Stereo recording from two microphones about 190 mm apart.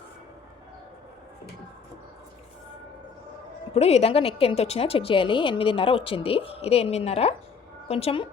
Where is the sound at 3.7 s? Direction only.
35° left (ahead or behind).